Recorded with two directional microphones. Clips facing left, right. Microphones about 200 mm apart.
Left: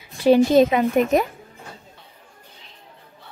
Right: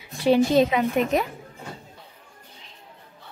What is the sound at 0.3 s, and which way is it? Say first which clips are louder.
Speech: left 4 dB; 45° left (ahead or behind).